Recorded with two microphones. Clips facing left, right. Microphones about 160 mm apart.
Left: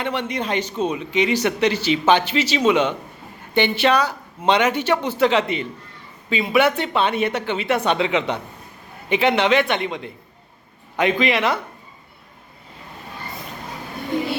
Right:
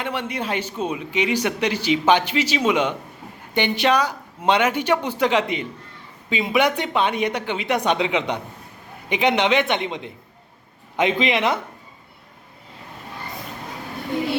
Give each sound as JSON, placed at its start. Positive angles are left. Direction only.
{"t": 0.0, "sound": "a man's voice", "side_deg": -10}